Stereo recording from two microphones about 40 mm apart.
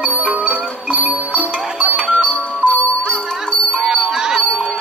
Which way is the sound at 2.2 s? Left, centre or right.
Left.